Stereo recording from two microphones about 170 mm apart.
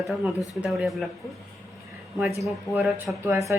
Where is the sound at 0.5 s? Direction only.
Centre (ahead or behind).